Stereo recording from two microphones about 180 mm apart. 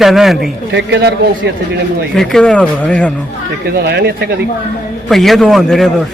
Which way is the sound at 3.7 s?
65° right (ahead or behind).